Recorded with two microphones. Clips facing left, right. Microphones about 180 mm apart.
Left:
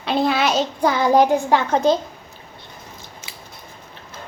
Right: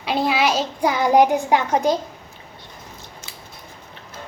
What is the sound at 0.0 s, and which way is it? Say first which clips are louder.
A child's voice: left 1 dB; 10° right (ahead or behind).